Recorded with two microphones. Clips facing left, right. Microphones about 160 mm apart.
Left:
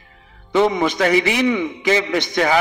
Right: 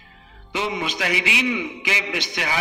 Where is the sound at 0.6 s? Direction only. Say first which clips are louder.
Left 10 dB; 45° left (ahead or behind).